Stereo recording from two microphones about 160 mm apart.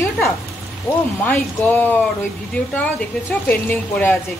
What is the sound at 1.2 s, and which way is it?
Speech, 10° left (ahead or behind).